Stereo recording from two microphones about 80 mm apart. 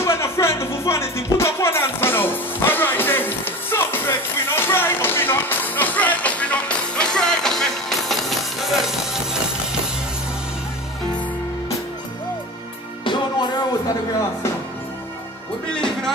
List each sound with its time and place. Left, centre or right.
0.0 s music: left; by 9.4 s centre
13.0 s music: left
15.7 s music: centre